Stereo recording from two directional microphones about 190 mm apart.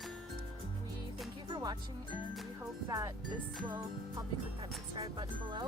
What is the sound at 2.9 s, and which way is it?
Speech, 20° right (ahead or behind).